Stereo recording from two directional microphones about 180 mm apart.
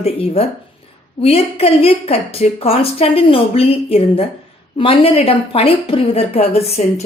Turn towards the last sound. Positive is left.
turn(degrees=35)  # may be behind; listen again after turning